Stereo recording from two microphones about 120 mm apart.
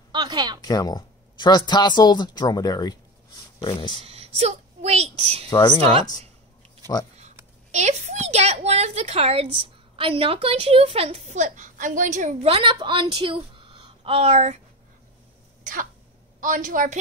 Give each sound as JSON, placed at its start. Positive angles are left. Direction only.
{"t": 0.1, "sound": "a sound", "side_deg": -35}
{"t": 0.6, "sound": "speech", "side_deg": 35}
{"t": 4.0, "sound": "a woman's voice", "side_deg": -60}
{"t": 5.5, "sound": "speech", "side_deg": 40}
{"t": 7.7, "sound": "a woman's voice", "side_deg": -75}
{"t": 12.4, "sound": "a woman's voice", "side_deg": -50}
{"t": 16.3, "sound": "a woman's voice", "side_deg": -90}